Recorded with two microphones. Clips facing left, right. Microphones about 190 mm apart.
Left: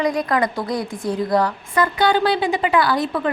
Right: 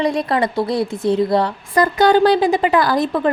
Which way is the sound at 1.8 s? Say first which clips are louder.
Right 5 dB; 40° right (ahead or behind).